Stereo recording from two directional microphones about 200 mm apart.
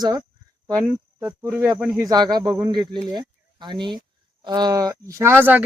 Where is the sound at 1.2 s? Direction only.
10° right (ahead or behind).